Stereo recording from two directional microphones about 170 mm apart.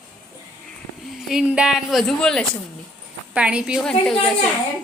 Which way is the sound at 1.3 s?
5° right (ahead or behind).